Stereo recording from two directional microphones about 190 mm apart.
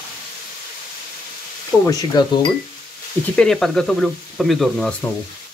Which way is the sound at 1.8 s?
20° left (ahead or behind).